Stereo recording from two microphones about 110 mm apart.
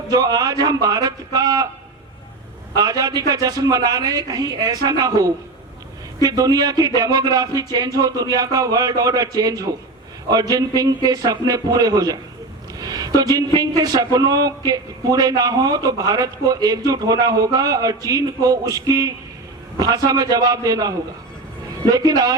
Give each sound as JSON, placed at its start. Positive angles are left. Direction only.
{"t": 0.1, "sound": "a man's voice", "side_deg": -35}
{"t": 2.7, "sound": "a man's voice", "side_deg": -35}